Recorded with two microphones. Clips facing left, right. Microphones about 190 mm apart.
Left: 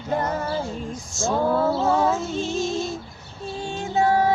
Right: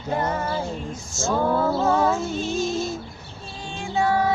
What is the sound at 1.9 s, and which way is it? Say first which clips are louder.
Music: even; centre (ahead or behind).